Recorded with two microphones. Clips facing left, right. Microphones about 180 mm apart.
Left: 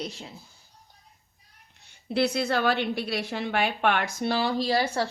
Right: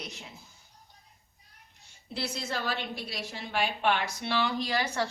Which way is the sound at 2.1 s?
65° left (ahead or behind).